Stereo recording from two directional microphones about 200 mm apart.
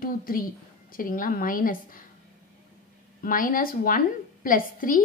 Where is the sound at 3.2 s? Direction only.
45° left (ahead or behind).